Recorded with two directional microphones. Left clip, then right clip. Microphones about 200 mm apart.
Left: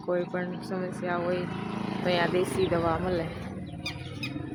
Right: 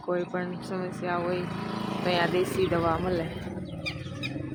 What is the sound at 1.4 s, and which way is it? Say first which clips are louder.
Speech: right 1 dB; 35° right (ahead or behind).